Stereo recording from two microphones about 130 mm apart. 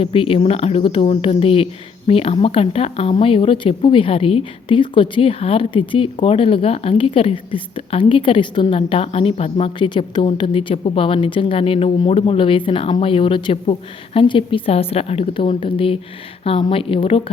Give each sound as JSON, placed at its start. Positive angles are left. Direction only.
{"t": 0.0, "sound": "speech", "side_deg": 45}